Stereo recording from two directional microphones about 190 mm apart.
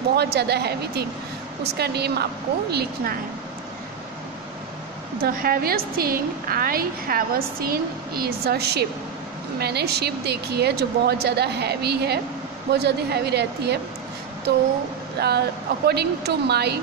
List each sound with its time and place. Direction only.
0.1 s a woman's voice: 60° right (ahead or behind)
5.2 s a woman's voice: 50° right (ahead or behind)
15.1 s a woman's voice: 55° right (ahead or behind)